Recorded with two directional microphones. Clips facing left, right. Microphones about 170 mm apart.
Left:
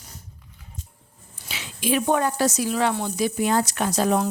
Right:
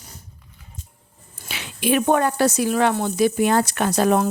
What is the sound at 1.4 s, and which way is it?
Speech, 60° right (ahead or behind).